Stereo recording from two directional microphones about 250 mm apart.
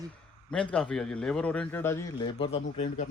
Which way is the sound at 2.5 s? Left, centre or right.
Left.